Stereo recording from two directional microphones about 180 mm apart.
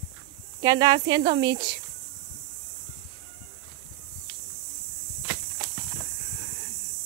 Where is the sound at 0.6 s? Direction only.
20° right (ahead or behind).